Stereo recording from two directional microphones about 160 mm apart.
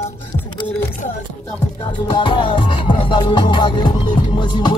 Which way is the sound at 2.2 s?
30° left (ahead or behind).